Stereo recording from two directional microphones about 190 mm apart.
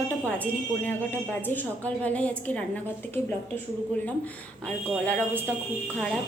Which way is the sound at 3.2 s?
35° right (ahead or behind).